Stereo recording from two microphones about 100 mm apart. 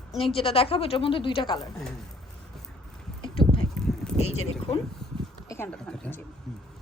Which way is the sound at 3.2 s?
60° left (ahead or behind).